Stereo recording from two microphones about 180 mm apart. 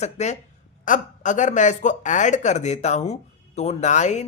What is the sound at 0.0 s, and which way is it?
Speech, 40° left (ahead or behind).